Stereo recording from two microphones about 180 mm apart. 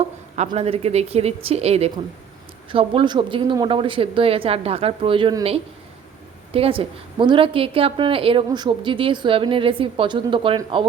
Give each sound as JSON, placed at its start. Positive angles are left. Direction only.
{"t": 0.3, "sound": "a woman's voice", "side_deg": -35}